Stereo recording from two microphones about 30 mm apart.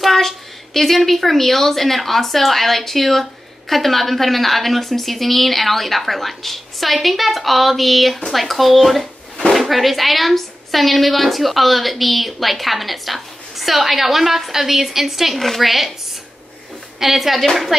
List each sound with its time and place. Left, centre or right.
0.0 s a woman's voice: centre
15.3 s a woman's voice: centre
17.0 s speech: centre